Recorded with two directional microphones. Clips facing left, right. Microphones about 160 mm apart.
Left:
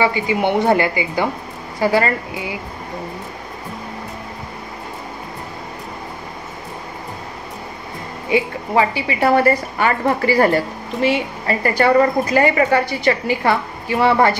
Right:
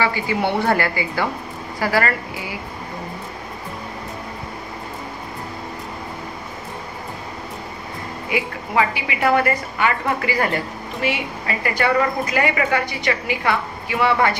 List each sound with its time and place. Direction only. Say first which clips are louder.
0.0 s a woman's voice: left 3 dB; 20° left (ahead or behind)
8.3 s a woman's voice: left 6 dB; 30° left (ahead or behind)